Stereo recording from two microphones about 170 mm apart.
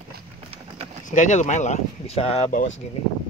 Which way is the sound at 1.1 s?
45° left (ahead or behind).